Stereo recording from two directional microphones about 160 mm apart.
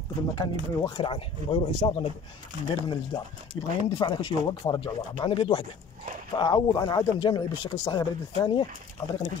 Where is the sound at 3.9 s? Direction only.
30° left (ahead or behind).